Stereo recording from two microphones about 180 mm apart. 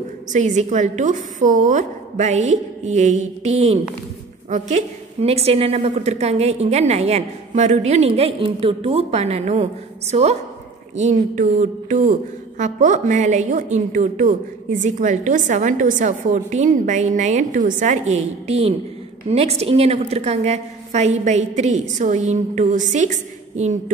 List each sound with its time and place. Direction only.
0.3 s a woman's voice: 40° right (ahead or behind)